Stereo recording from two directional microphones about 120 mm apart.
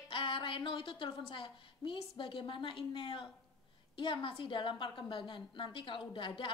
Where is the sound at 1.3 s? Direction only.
45° left (ahead or behind).